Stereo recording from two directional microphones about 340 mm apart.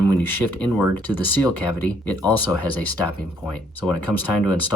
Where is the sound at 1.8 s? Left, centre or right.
Centre.